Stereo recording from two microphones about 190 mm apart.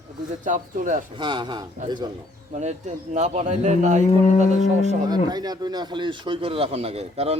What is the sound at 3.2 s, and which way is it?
Speech, 40° right (ahead or behind).